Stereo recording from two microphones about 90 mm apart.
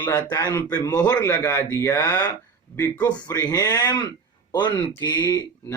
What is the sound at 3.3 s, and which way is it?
Speech, 40° left (ahead or behind).